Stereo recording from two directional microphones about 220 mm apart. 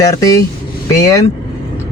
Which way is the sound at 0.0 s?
15° left (ahead or behind).